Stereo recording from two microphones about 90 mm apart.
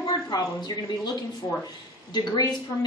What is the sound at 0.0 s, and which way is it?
A woman's voice, 45° left (ahead or behind).